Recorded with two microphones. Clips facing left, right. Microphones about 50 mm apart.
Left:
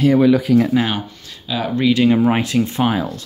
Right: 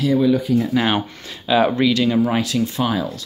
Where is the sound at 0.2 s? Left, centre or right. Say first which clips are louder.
Left 4 dB; left.